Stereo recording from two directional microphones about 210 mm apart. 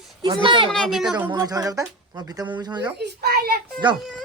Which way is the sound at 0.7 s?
Centre (ahead or behind).